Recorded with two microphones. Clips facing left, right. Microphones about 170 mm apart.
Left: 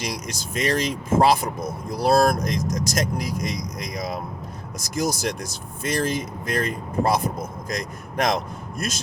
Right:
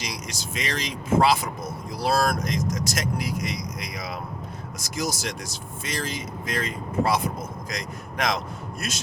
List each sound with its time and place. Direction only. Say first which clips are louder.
0.0 s speech: left 4 dB; 50° left (ahead or behind)